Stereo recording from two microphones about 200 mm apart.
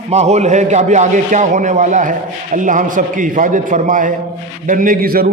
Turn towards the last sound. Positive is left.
turn(degrees=-45)  # may be behind; listen again after turning